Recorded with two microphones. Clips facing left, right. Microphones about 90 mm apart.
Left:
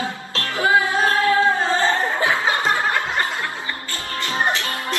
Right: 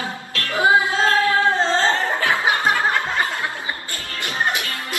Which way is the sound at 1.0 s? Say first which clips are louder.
Right 1 dB; 25° left (ahead or behind).